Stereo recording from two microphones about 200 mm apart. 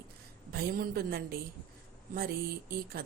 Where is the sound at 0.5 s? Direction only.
50° right (ahead or behind).